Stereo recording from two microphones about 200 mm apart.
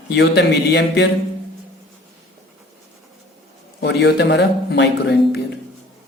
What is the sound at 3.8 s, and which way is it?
Speech, 55° left (ahead or behind).